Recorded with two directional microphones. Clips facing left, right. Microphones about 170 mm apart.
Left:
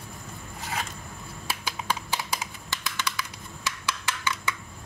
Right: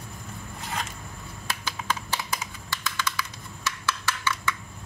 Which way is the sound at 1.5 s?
10° left (ahead or behind).